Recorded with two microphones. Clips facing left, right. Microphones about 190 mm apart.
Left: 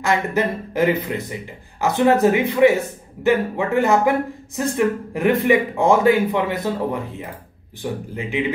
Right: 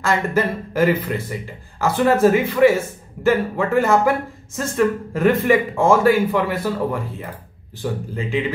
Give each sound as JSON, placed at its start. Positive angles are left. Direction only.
{"t": 0.0, "sound": "a man's voice", "side_deg": 20}